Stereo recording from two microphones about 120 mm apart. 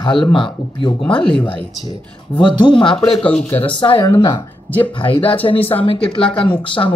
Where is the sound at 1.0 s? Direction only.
5° left (ahead or behind).